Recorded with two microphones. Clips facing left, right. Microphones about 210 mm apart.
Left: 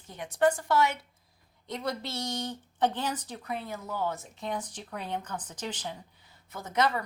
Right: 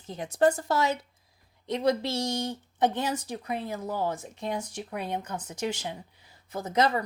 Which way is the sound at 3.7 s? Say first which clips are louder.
Right 3 dB; 30° right (ahead or behind).